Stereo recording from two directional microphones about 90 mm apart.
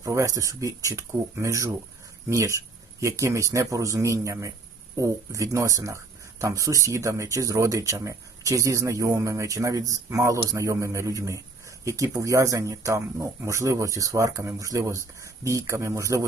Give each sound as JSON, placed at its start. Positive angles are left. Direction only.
{"t": 0.0, "sound": "speech", "side_deg": -35}